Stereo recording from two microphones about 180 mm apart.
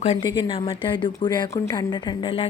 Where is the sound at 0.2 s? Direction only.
25° left (ahead or behind).